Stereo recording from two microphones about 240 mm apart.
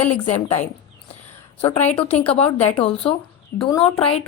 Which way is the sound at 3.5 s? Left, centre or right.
Left.